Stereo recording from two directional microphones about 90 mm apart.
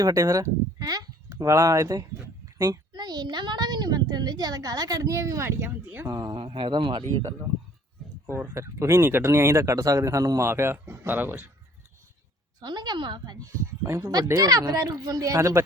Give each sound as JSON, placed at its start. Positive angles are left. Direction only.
{"t": 0.0, "sound": "speech", "side_deg": -40}
{"t": 2.6, "sound": "a woman's voice", "side_deg": -50}
{"t": 6.1, "sound": "a woman's voice", "side_deg": -45}
{"t": 6.3, "sound": "speech", "side_deg": -80}
{"t": 8.3, "sound": "speech", "side_deg": -30}
{"t": 12.5, "sound": "a woman's voice", "side_deg": -50}
{"t": 13.8, "sound": "a woman's voice", "side_deg": -40}